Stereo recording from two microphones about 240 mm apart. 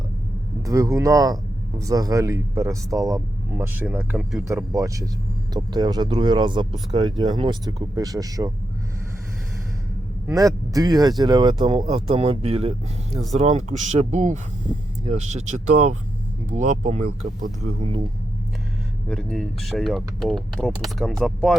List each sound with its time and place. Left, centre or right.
0.6 s speech: centre
4.4 s speech: centre
10.2 s speech: centre
19.0 s speech: centre